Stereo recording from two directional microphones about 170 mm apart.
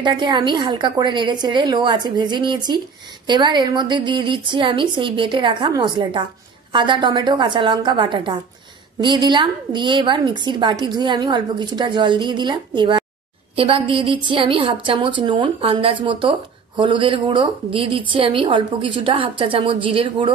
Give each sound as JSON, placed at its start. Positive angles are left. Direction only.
{"t": 0.0, "sound": "a woman's voice", "side_deg": -25}